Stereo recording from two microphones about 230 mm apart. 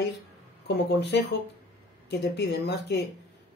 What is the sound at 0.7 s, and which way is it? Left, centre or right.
Speech, left.